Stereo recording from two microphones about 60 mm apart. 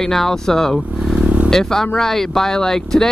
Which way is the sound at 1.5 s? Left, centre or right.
Centre.